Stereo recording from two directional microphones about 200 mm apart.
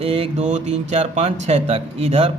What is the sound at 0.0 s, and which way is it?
A man's voice, 30° right (ahead or behind).